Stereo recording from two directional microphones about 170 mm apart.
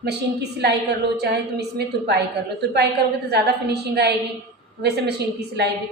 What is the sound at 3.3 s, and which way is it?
A woman's voice, 75° right (ahead or behind).